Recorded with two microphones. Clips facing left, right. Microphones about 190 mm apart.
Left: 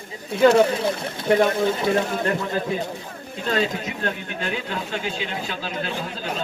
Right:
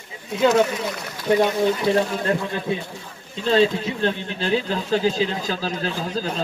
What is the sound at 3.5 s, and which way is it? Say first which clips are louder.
Speech: right 6 dB; 30° right (ahead or behind).